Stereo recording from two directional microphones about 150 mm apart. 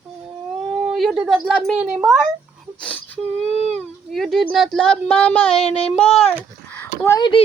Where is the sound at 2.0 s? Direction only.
Centre (ahead or behind).